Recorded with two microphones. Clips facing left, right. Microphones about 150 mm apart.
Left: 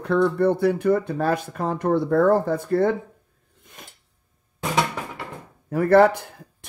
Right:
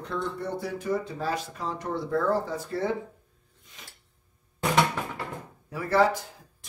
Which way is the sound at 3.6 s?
55° left (ahead or behind).